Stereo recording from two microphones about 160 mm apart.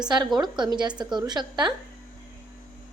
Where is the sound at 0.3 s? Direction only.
25° right (ahead or behind).